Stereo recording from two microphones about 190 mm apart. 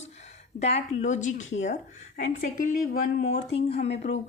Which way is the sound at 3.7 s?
35° left (ahead or behind).